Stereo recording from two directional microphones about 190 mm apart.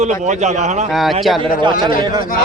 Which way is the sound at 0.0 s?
40° right (ahead or behind).